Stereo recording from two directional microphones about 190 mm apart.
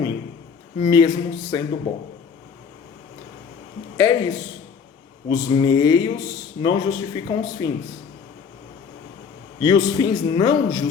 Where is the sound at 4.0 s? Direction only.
20° left (ahead or behind).